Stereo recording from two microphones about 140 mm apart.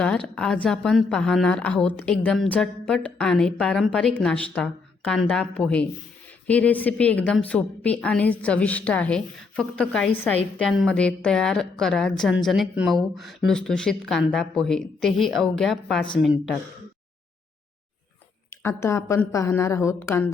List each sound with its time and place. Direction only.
0.0 s a woman's voice: 5° left (ahead or behind)
18.8 s a woman's voice: 20° left (ahead or behind)